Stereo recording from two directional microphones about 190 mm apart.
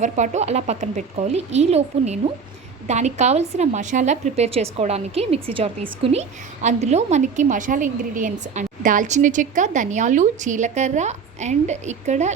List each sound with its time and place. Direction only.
0.0 s a woman's voice: 35° right (ahead or behind)